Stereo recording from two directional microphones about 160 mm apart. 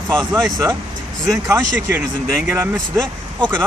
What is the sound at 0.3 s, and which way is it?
Speech, 20° right (ahead or behind).